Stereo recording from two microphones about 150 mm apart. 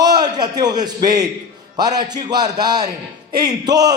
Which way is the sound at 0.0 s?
25° right (ahead or behind).